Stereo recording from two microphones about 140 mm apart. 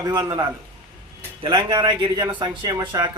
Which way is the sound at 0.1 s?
25° right (ahead or behind).